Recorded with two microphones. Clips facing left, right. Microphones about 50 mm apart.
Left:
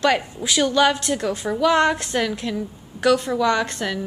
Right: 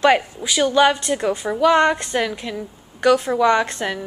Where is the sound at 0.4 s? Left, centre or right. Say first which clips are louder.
Right 2 dB; centre.